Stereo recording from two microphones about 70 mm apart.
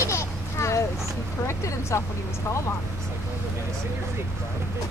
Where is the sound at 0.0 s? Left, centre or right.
Left.